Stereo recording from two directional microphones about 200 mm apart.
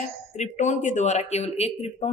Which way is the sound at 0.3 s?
35° left (ahead or behind).